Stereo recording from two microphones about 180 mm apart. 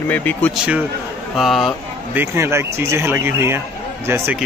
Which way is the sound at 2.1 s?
10° right (ahead or behind).